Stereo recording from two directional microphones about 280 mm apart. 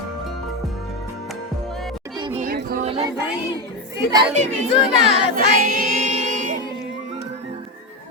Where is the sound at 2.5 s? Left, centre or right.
Right.